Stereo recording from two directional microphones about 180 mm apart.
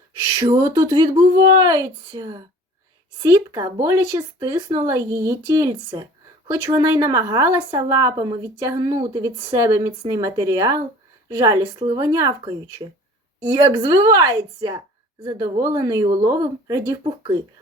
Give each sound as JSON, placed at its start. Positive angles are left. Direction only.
{"t": 0.3, "sound": "a woman's voice", "side_deg": -20}